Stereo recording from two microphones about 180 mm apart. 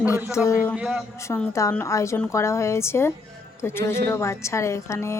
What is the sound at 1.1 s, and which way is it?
A woman's voice, 15° left (ahead or behind).